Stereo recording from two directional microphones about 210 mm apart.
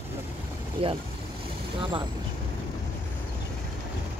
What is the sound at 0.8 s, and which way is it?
Speech, 25° right (ahead or behind).